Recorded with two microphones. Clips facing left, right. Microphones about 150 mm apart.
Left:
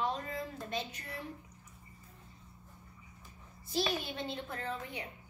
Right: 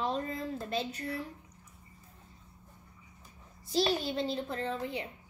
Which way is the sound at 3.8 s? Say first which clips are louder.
Right 5 dB; 30° right (ahead or behind).